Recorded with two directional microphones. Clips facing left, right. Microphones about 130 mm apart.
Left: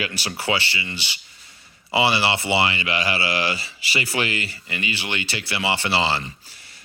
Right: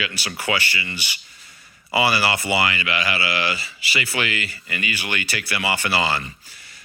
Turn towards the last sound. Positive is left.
turn(degrees=30)  # may be behind; listen again after turning